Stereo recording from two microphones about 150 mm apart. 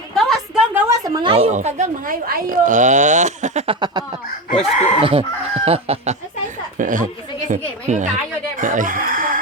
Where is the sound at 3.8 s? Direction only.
30° right (ahead or behind).